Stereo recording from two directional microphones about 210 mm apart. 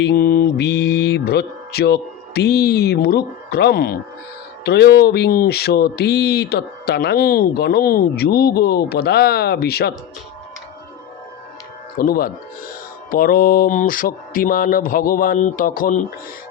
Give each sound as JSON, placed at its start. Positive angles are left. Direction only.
{"t": 0.0, "sound": "speech", "side_deg": 45}
{"t": 11.9, "sound": "speech", "side_deg": 45}